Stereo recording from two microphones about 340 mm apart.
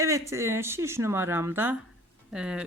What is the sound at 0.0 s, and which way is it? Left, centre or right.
Speech, centre.